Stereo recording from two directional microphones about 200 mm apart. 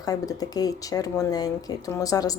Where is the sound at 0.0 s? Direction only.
20° left (ahead or behind).